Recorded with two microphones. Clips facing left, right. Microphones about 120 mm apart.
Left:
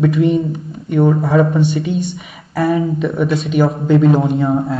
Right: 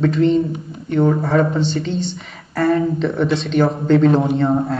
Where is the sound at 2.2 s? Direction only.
5° left (ahead or behind).